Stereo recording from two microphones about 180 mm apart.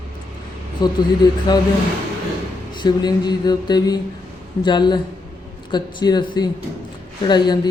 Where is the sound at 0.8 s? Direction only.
25° left (ahead or behind).